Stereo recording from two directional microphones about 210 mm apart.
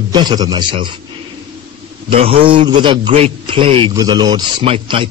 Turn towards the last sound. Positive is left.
turn(degrees=-25)  # may be behind; listen again after turning